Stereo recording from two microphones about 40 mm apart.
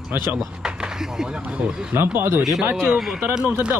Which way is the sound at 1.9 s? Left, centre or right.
Right.